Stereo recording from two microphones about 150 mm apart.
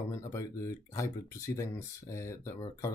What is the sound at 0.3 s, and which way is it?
Speech, 20° left (ahead or behind).